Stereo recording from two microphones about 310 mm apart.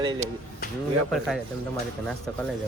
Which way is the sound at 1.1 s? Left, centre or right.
Centre.